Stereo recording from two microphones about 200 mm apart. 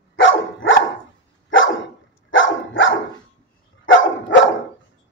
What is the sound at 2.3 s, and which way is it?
Dog, 70° left (ahead or behind).